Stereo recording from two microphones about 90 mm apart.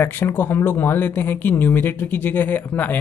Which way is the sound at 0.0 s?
25° left (ahead or behind).